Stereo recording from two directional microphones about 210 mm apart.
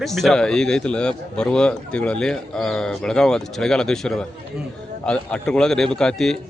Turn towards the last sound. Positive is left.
turn(degrees=5)  # may be behind; listen again after turning